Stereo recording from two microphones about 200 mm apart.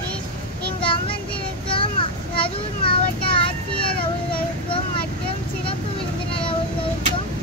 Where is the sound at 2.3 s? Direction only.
25° left (ahead or behind).